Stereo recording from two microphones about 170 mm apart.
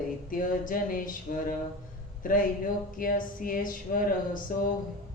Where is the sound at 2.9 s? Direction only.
55° left (ahead or behind).